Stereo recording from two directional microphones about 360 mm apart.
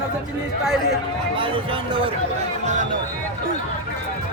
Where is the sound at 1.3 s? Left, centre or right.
Centre.